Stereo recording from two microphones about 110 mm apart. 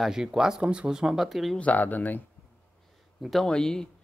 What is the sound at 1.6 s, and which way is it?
Speech, 15° left (ahead or behind).